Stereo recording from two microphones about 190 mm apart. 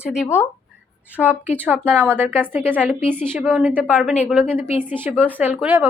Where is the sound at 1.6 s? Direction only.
10° right (ahead or behind).